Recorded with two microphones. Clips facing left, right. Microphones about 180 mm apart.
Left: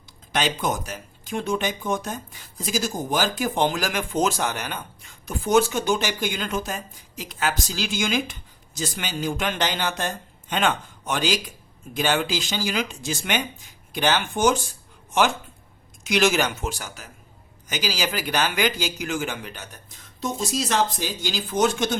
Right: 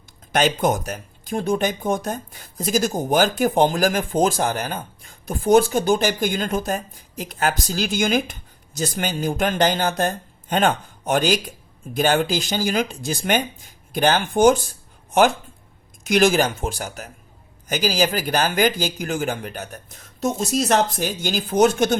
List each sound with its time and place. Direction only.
0.3 s speech: 50° right (ahead or behind)
6.1 s speech: 40° right (ahead or behind)
16.0 s speech: 50° right (ahead or behind)
20.6 s speech: 45° right (ahead or behind)